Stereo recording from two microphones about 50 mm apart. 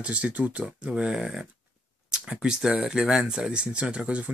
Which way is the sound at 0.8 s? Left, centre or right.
Centre.